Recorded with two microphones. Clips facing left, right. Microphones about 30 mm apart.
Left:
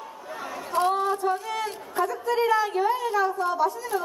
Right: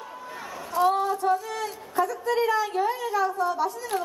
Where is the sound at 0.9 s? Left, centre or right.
Left.